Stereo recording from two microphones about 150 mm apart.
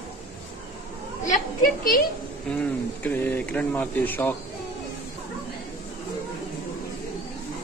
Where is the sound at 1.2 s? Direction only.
60° left (ahead or behind).